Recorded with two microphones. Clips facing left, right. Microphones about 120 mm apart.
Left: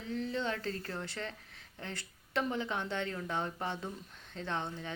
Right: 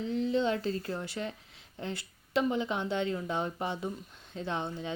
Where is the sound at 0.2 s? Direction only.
20° right (ahead or behind).